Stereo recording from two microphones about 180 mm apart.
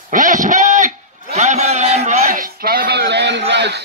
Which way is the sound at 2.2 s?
50° right (ahead or behind).